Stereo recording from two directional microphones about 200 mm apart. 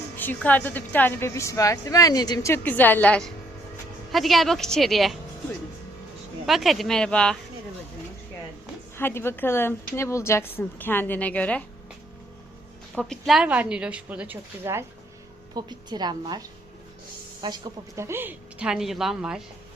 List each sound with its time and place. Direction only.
0.2 s a woman's voice: 10° left (ahead or behind)
6.4 s a woman's voice: centre (ahead or behind)
9.0 s a woman's voice: 10° left (ahead or behind)
12.9 s a woman's voice: centre (ahead or behind)